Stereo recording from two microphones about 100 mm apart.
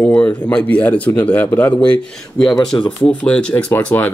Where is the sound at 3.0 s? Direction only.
10° left (ahead or behind).